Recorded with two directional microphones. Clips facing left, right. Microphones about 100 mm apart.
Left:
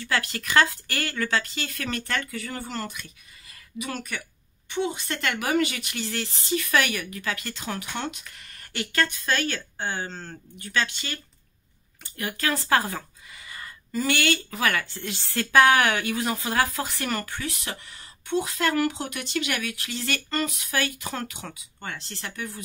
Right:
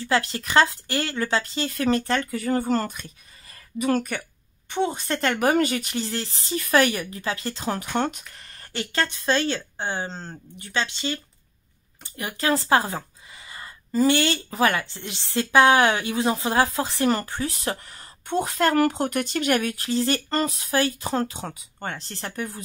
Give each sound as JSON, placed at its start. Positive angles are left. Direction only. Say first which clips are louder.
{"t": 0.0, "sound": "speech", "louder": "right 4 dB", "side_deg": -30}